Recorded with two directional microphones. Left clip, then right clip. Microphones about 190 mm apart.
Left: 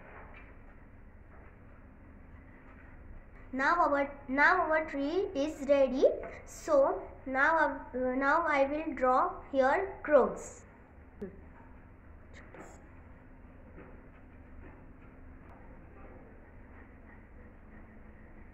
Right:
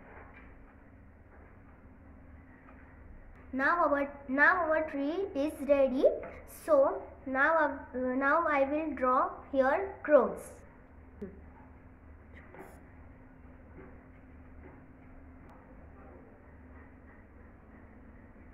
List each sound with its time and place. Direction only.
3.5 s a woman's voice: 20° left (ahead or behind)
11.2 s speech: centre (ahead or behind)